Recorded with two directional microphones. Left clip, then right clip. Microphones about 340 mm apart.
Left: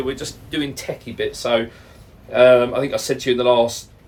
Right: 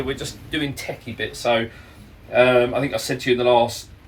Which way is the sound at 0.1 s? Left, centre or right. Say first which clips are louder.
Even; centre.